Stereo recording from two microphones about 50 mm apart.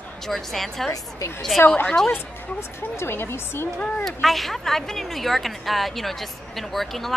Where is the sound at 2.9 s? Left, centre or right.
Left.